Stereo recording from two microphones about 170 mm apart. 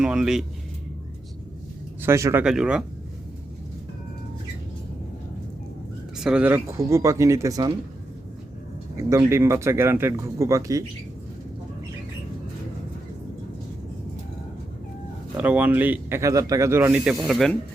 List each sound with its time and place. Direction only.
0.0 s speech: 5° right (ahead or behind)
2.0 s speech: 15° right (ahead or behind)
2.4 s speech: 5° right (ahead or behind)
6.1 s speech: 5° right (ahead or behind); by 7.7 s 20° right (ahead or behind)
9.0 s speech: 15° right (ahead or behind)
15.4 s speech: 10° right (ahead or behind)